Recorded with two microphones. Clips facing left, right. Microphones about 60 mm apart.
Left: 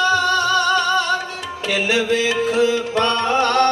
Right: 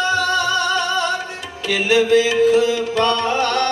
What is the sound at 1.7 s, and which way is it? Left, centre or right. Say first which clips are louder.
Music: right 4 dB; left.